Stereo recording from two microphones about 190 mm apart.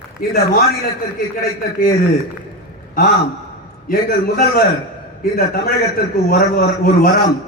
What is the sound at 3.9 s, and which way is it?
A man's voice, 55° left (ahead or behind).